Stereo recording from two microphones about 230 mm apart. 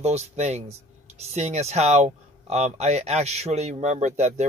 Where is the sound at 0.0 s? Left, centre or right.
Right.